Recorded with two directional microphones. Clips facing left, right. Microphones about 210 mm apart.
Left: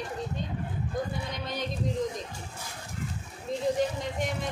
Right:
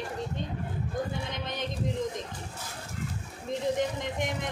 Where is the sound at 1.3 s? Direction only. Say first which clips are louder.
Left 1 dB; 20° right (ahead or behind).